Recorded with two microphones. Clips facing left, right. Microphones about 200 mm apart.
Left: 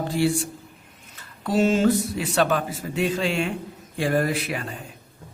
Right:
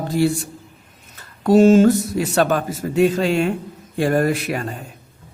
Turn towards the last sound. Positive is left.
turn(degrees=-45)  # may be behind; listen again after turning